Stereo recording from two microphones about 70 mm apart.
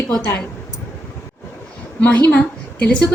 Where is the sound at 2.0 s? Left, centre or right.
Centre.